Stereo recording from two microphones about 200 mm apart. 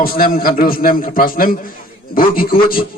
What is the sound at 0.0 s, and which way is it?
A man's voice, 45° left (ahead or behind).